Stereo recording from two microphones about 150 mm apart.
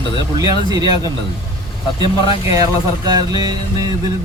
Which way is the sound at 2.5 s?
25° right (ahead or behind).